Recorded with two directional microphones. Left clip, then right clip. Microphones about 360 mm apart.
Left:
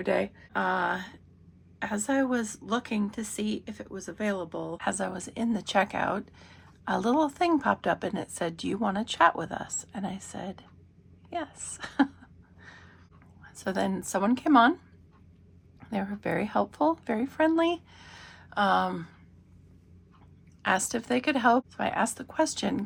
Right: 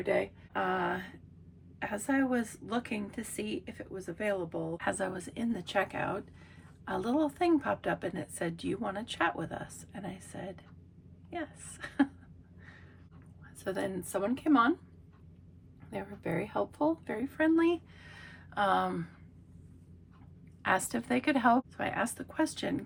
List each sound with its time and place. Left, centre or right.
0.0 s a woman's voice: centre
13.4 s a woman's voice: centre
15.9 s a woman's voice: centre
20.6 s a woman's voice: centre